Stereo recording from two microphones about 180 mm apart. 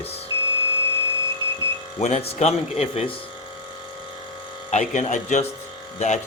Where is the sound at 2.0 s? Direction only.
40° left (ahead or behind).